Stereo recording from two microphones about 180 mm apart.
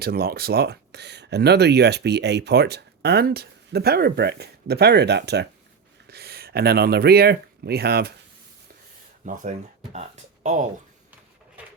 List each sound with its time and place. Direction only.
0.0 s speech: 60° right (ahead or behind)
9.2 s speech: 45° right (ahead or behind)